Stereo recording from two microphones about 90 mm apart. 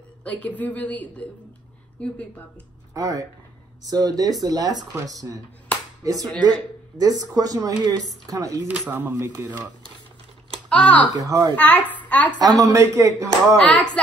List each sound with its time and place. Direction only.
0.2 s a woman's voice: 15° left (ahead or behind)
2.9 s speech: 40° right (ahead or behind)
8.6 s speech: 20° right (ahead or behind)
9.2 s speech: 30° right (ahead or behind)
10.7 s speech: 15° left (ahead or behind)
11.1 s speech: 40° right (ahead or behind)
11.5 s a woman's voice: 15° left (ahead or behind)
12.0 s a sound: 15° left (ahead or behind)
12.4 s speech: 45° right (ahead or behind)
13.6 s a woman's voice: 15° left (ahead or behind)